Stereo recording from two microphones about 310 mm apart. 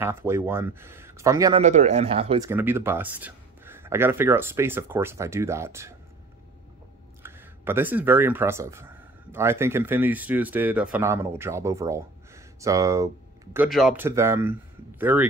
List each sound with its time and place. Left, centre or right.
0.0 s speech: centre
1.6 s speech: right
2.5 s speech: centre
7.2 s speech: centre